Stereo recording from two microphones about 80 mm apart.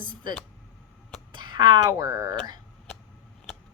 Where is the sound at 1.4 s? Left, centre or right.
Right.